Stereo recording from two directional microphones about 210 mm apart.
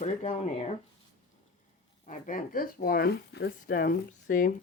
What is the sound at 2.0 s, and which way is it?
Speech, 40° left (ahead or behind).